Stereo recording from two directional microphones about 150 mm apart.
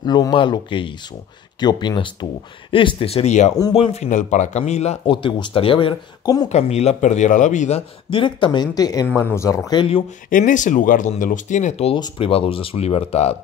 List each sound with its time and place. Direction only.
0.0 s a man's voice: 30° left (ahead or behind); by 5.1 s 45° left (ahead or behind)
5.1 s speech: 35° left (ahead or behind)
6.2 s speech: 25° left (ahead or behind)
6.5 s a man's voice: 45° left (ahead or behind)
8.1 s speech: 35° left (ahead or behind)
9.1 s speech: 15° left (ahead or behind)
9.7 s speech: 35° left (ahead or behind)
10.3 s speech: 60° left (ahead or behind)